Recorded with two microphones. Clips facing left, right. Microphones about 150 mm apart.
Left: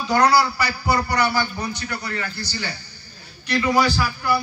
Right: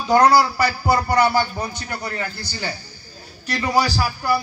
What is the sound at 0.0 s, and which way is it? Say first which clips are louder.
A man's voice: right 3 dB; 50° right (ahead or behind).